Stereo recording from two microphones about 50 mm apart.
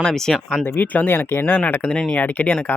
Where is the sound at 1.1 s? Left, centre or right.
Left.